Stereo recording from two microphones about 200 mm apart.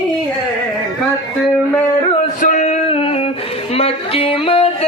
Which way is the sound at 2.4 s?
40° left (ahead or behind).